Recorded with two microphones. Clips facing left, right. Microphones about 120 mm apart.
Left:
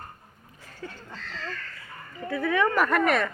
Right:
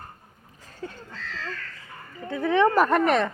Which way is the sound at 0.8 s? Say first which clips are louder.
Right 3 dB; 30° right (ahead or behind).